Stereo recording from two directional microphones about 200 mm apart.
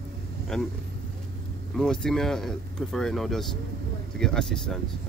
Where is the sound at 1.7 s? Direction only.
5° left (ahead or behind).